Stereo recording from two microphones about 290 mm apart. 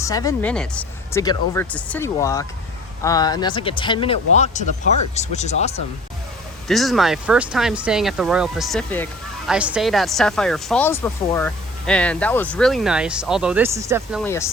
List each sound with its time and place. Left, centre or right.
0.0 s speech: centre
6.7 s speech: centre
14.3 s speech: centre